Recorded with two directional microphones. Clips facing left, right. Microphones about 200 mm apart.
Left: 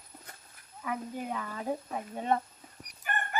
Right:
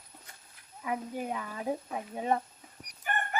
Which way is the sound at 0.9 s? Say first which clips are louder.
Right 1 dB; 15° right (ahead or behind).